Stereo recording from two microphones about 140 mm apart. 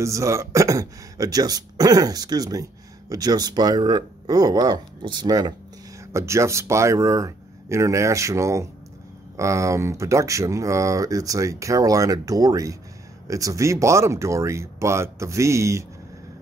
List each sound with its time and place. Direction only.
0.0 s speech: 20° right (ahead or behind)